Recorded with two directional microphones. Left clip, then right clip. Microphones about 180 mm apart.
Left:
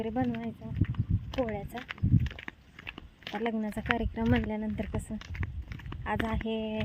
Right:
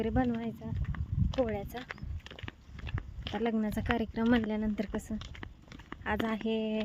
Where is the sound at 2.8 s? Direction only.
Centre (ahead or behind).